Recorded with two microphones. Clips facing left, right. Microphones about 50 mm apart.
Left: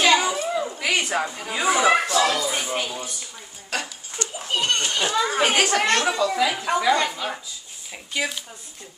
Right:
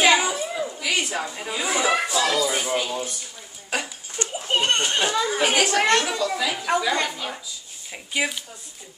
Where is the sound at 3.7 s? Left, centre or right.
Centre.